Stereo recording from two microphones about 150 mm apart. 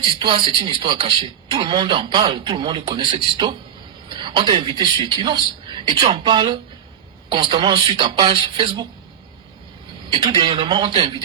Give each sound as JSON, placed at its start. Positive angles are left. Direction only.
{"t": 0.0, "sound": "a man's voice", "side_deg": -30}
{"t": 10.1, "sound": "a man's voice", "side_deg": -30}